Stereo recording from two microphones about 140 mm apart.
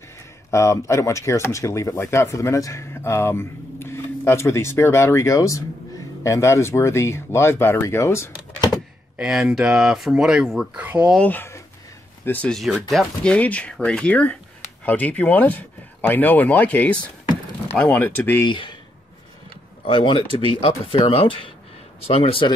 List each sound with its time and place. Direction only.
0.5 s speech: 20° left (ahead or behind)
9.2 s speech: 5° right (ahead or behind)
11.1 s speech: 10° left (ahead or behind)
18.5 s speech: 35° left (ahead or behind)
19.9 s speech: 35° left (ahead or behind)